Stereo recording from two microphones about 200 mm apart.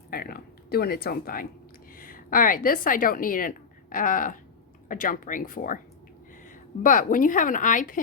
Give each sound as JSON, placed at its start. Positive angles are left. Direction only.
{"t": 0.1, "sound": "a woman's voice", "side_deg": 50}